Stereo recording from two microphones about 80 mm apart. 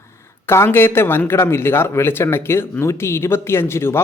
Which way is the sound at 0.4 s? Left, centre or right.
Left.